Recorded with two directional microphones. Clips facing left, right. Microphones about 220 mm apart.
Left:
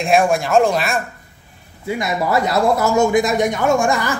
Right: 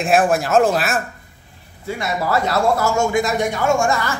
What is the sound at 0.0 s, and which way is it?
Speech, centre (ahead or behind).